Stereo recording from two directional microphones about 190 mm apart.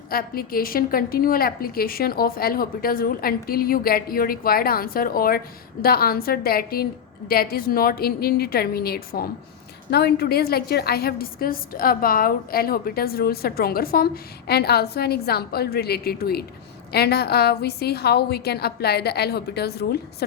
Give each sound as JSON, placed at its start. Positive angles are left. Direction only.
{"t": 0.1, "sound": "a woman's voice", "side_deg": 50}